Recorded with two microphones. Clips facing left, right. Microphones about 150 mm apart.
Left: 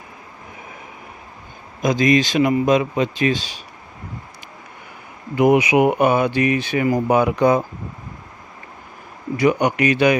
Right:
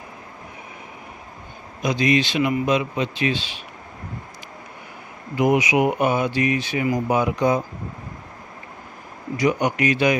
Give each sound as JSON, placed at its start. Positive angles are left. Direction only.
{"t": 1.8, "sound": "speech", "side_deg": 45}
{"t": 5.4, "sound": "speech", "side_deg": 60}
{"t": 9.4, "sound": "speech", "side_deg": 60}